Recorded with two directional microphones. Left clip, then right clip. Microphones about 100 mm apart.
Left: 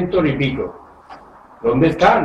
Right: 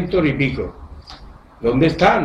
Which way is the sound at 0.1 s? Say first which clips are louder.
Right 1 dB; 25° right (ahead or behind).